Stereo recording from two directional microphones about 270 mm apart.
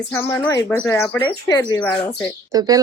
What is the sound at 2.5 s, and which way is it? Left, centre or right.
Speech, centre.